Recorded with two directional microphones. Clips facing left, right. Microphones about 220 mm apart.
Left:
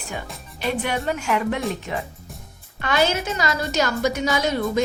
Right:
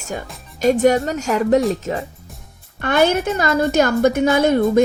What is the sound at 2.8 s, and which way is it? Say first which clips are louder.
A woman's voice: right 5 dB; 55° right (ahead or behind).